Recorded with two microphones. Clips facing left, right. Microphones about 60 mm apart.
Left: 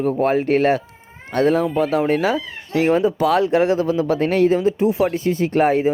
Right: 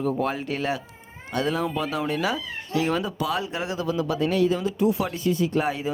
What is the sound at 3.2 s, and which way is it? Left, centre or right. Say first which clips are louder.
Speech: left 11 dB; left.